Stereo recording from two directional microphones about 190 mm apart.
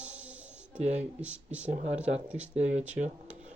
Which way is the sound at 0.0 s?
5° right (ahead or behind).